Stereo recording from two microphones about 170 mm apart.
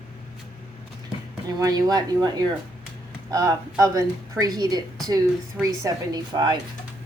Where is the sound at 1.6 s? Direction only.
20° right (ahead or behind).